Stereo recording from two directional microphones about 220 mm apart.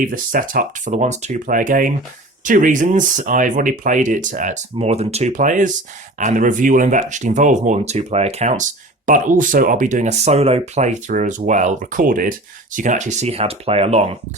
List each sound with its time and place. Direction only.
0.0 s speech: 40° right (ahead or behind)